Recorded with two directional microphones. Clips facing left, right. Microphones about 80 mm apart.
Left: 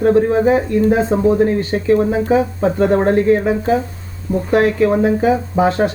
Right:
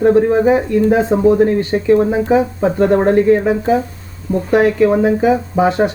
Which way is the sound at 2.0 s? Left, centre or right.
Right.